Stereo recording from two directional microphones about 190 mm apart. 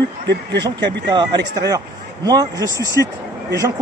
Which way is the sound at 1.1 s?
20° right (ahead or behind).